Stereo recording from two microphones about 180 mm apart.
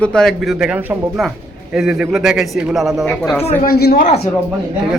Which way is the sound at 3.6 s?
60° left (ahead or behind).